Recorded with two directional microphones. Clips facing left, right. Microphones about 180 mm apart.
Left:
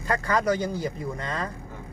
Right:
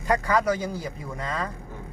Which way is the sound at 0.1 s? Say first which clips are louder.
Right 1 dB; 10° right (ahead or behind).